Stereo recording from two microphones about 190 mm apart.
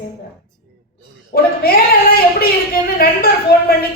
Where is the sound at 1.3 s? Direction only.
50° left (ahead or behind).